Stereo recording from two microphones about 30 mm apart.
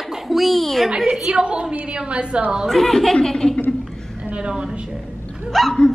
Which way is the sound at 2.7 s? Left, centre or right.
Centre.